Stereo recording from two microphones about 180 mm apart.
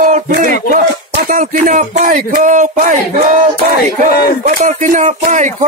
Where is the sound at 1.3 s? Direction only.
45° right (ahead or behind).